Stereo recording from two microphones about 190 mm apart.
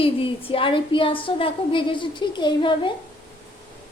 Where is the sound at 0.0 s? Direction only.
30° left (ahead or behind).